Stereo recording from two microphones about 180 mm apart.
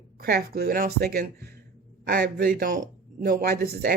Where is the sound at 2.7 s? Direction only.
50° right (ahead or behind).